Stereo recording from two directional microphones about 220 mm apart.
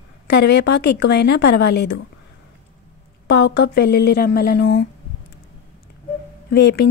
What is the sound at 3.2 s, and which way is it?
Speech, 50° left (ahead or behind).